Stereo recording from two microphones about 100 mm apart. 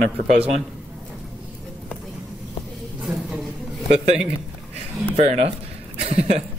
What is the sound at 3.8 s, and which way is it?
A man's voice, 90° right.